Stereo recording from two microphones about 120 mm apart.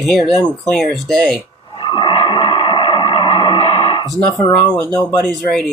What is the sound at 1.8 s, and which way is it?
Music, 40° left (ahead or behind).